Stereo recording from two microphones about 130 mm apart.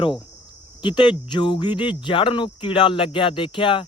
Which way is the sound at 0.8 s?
35° left (ahead or behind).